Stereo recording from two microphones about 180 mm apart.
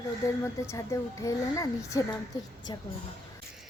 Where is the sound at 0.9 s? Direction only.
15° left (ahead or behind).